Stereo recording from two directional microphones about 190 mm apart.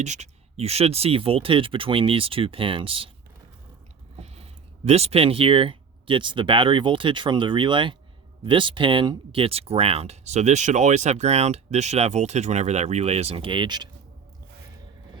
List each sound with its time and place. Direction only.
0.0 s speech: 35° right (ahead or behind)
4.2 s a sound: 35° right (ahead or behind)
4.9 s speech: 35° right (ahead or behind)